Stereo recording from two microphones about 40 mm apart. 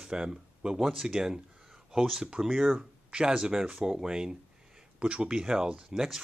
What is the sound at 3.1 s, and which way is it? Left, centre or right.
Speech, right.